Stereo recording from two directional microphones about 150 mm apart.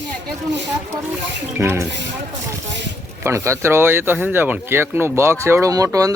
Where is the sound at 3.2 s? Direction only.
20° right (ahead or behind).